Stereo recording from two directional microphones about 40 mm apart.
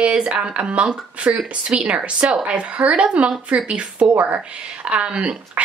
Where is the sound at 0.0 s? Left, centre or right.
Right.